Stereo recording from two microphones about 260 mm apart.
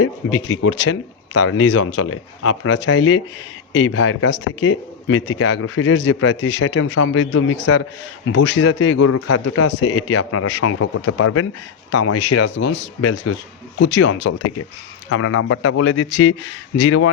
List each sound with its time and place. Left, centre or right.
0.0 s a man's voice: left
9.0 s a man's voice: left
12.5 s speech: left
13.3 s a man's voice: left
13.7 s speech: left
15.1 s speech: left